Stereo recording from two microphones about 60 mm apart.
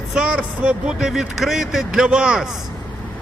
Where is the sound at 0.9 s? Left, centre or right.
Centre.